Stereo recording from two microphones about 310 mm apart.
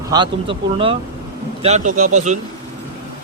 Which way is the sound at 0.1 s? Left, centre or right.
Centre.